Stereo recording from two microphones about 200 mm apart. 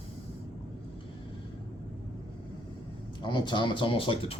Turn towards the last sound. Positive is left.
turn(degrees=25)  # may be behind; listen again after turning